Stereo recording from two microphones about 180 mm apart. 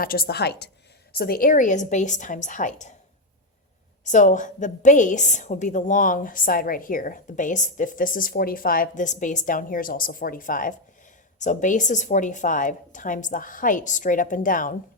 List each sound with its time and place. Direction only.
0.0 s a woman's voice: 55° left (ahead or behind)
4.0 s a woman's voice: 45° left (ahead or behind)